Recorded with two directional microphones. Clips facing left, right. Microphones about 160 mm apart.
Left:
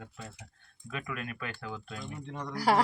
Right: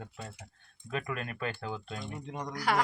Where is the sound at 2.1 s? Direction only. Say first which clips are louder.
Even; 15° right (ahead or behind).